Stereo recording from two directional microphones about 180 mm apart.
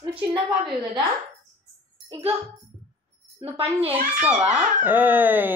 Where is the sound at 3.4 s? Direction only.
35° right (ahead or behind).